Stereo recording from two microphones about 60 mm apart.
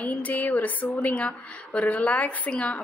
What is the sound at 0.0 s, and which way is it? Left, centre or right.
A woman's voice, left.